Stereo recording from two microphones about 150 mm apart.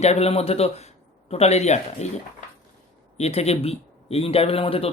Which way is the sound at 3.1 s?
45° left (ahead or behind).